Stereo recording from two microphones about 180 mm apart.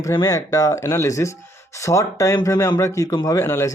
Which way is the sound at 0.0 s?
20° left (ahead or behind).